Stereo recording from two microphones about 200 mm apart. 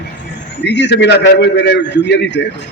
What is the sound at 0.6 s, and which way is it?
A man's voice, 60° left (ahead or behind).